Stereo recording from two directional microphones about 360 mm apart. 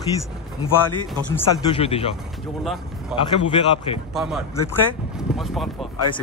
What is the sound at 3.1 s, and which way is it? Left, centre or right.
A man's voice, centre.